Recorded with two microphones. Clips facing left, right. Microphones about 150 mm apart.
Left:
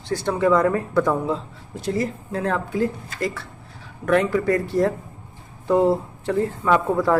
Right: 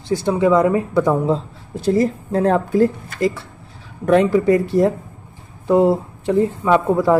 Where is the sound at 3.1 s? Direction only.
20° right (ahead or behind).